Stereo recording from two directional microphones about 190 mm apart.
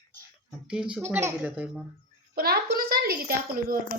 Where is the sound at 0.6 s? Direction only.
5° right (ahead or behind).